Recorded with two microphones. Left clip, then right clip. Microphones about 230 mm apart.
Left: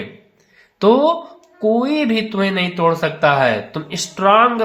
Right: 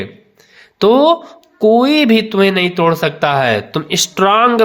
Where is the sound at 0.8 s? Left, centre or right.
Right.